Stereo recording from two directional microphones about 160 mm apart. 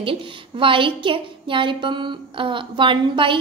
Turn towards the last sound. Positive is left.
turn(degrees=-30)  # may be behind; listen again after turning